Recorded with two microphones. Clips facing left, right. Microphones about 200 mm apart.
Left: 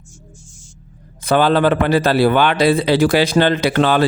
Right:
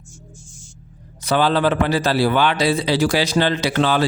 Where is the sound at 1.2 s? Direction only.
55° left (ahead or behind).